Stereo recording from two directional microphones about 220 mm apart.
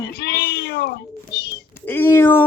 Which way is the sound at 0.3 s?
45° left (ahead or behind).